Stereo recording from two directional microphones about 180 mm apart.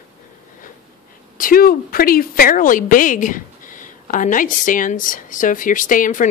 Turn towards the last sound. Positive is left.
turn(degrees=45)  # may be behind; listen again after turning